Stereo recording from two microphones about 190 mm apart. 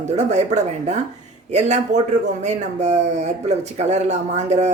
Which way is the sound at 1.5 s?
35° right (ahead or behind).